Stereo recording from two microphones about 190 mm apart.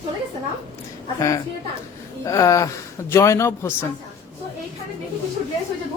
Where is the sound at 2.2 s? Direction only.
15° left (ahead or behind).